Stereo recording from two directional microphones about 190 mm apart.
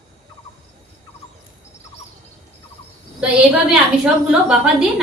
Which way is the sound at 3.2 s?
5° right (ahead or behind).